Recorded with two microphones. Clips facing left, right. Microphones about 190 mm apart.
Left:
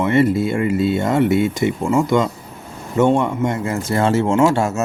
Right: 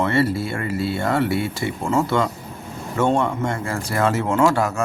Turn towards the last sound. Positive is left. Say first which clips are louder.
# left 3 dB
turn(degrees=25)  # may be behind; listen again after turning